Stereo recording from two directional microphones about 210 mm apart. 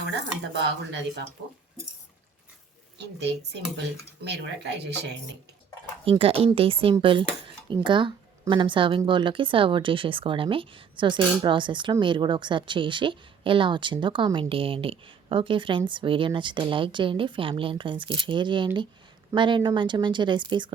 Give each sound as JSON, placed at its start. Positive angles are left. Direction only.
{"t": 3.0, "sound": "speech", "side_deg": -55}
{"t": 6.1, "sound": "speech", "side_deg": -25}